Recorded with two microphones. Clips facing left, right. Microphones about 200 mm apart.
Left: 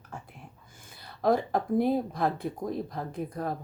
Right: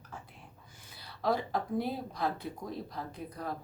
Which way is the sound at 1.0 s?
50° left (ahead or behind).